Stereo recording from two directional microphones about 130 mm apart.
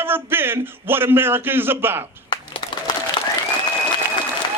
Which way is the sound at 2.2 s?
35° left (ahead or behind).